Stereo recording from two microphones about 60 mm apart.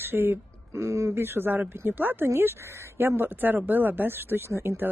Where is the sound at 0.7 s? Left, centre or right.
Right.